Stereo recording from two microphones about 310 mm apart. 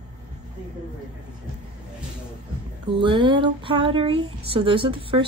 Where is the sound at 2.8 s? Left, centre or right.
Centre.